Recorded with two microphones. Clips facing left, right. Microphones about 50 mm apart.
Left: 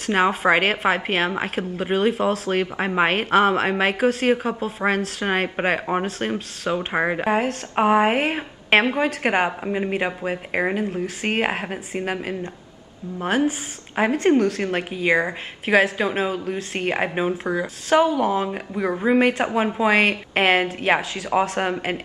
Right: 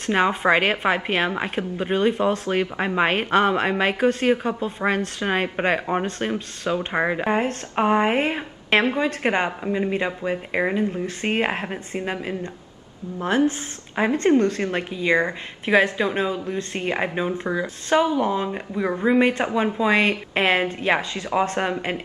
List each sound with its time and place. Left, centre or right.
0.0 s a woman's voice: centre
13.9 s speech: centre
16.4 s speech: left
16.9 s speech: centre